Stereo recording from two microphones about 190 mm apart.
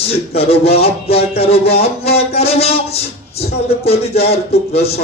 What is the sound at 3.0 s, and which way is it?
Music, 55° left (ahead or behind).